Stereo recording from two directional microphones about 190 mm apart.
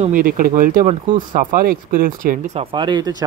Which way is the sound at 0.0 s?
45° right (ahead or behind).